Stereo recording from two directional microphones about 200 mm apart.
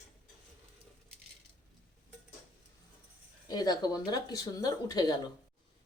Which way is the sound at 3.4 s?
20° left (ahead or behind).